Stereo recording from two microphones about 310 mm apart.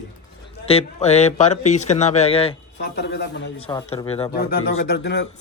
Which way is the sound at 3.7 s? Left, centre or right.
Centre.